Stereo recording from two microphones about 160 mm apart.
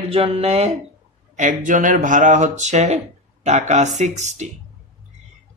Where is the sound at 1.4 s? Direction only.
55° right (ahead or behind).